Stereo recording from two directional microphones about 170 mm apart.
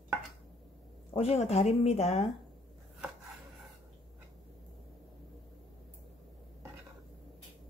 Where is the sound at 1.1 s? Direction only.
35° left (ahead or behind).